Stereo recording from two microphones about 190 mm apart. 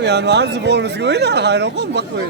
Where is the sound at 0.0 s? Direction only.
65° right (ahead or behind).